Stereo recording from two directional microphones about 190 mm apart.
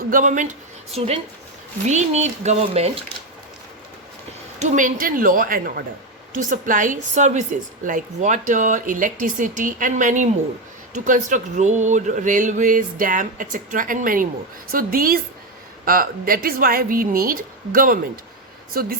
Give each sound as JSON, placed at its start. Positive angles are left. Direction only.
{"t": 0.1, "sound": "speech", "side_deg": -45}
{"t": 4.6, "sound": "a woman's voice", "side_deg": -40}